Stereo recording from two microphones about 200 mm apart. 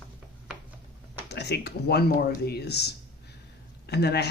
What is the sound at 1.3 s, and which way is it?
Speech, 55° left (ahead or behind).